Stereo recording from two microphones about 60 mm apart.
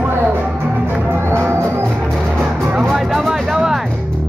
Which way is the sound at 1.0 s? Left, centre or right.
Right.